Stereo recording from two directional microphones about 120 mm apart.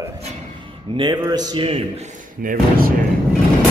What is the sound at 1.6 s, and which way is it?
Speech, 50° right (ahead or behind).